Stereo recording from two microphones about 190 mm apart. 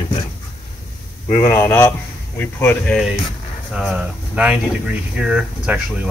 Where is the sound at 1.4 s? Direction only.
10° left (ahead or behind).